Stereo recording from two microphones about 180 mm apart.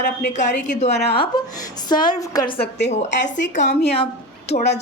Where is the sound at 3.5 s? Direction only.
40° left (ahead or behind).